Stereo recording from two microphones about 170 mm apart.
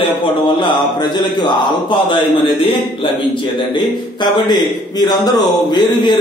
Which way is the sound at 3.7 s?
25° left (ahead or behind).